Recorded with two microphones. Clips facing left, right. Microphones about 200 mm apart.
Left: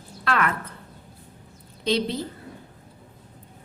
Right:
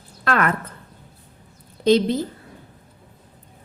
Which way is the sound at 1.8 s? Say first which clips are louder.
Right 8 dB; 45° right (ahead or behind).